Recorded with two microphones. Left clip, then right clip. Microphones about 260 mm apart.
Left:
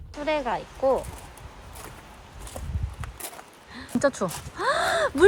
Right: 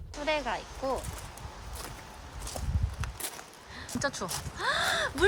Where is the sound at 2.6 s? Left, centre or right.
Centre.